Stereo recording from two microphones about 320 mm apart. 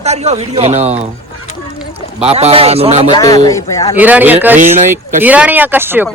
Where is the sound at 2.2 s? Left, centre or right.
Centre.